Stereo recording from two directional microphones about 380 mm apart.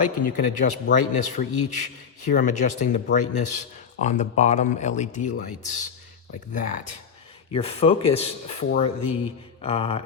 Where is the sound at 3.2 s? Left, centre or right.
Left.